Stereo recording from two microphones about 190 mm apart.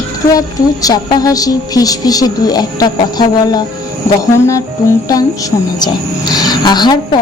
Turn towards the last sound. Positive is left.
turn(degrees=20)  # may be behind; listen again after turning